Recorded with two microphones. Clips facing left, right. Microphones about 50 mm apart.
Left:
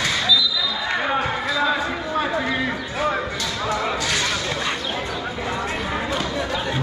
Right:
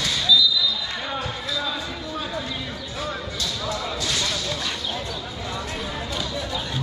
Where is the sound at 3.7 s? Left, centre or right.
Left.